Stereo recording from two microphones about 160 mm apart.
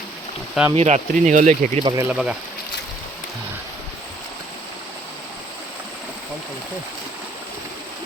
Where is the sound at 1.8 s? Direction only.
25° right (ahead or behind).